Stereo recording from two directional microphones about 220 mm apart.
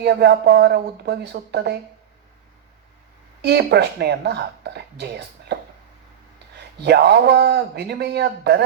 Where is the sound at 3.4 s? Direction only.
50° right (ahead or behind).